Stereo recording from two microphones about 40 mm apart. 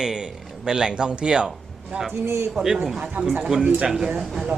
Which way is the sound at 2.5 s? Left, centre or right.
Centre.